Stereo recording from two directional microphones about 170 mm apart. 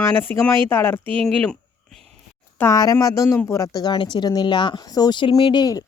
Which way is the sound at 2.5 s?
15° left (ahead or behind).